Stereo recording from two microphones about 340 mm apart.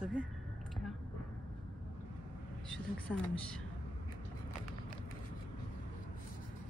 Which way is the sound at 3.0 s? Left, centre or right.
Centre.